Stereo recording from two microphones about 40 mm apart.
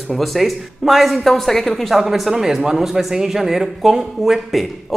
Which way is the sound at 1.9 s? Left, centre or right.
Centre.